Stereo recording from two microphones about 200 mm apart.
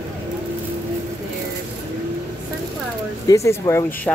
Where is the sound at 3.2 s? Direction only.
15° left (ahead or behind).